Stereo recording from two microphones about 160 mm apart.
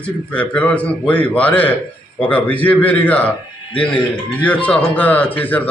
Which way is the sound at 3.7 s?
30° left (ahead or behind).